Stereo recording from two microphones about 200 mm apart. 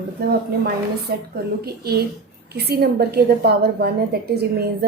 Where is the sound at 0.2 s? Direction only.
50° right (ahead or behind).